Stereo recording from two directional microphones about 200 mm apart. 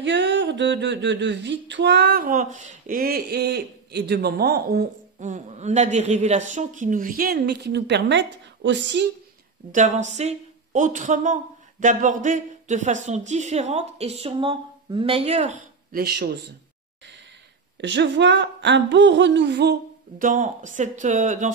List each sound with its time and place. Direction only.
0.0 s speech: 60° right (ahead or behind)
9.7 s speech: 40° right (ahead or behind)
17.7 s speech: 60° right (ahead or behind); by 21.5 s 40° right (ahead or behind)